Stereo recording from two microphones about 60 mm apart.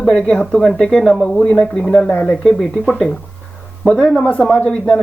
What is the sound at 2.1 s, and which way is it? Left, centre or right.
Speech, left.